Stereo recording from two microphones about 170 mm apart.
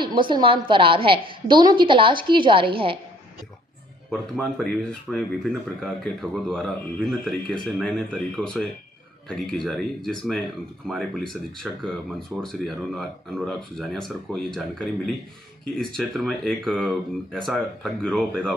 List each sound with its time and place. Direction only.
0.0 s a woman's voice: 30° right (ahead or behind)
4.1 s speech: centre (ahead or behind)
9.7 s speech: centre (ahead or behind)